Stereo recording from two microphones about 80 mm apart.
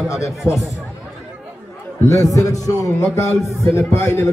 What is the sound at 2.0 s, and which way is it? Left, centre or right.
A man's voice, left.